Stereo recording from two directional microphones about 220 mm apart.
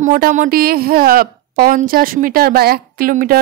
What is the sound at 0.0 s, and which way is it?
A woman's voice, 35° right (ahead or behind).